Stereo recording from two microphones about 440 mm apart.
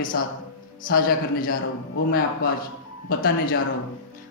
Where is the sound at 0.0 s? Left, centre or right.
Centre.